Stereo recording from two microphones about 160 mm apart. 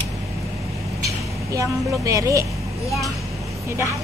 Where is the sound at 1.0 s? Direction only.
20° right (ahead or behind).